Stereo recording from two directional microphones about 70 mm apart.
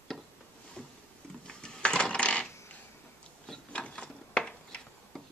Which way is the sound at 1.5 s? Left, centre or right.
Centre.